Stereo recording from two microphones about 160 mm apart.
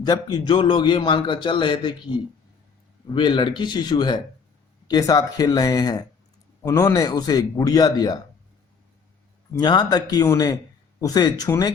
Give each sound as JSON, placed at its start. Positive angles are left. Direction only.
{"t": 0.0, "sound": "a man's voice", "side_deg": 25}
{"t": 9.6, "sound": "a man's voice", "side_deg": 25}